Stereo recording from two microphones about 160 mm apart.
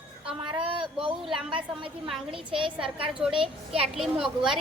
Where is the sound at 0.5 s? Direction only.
30° right (ahead or behind).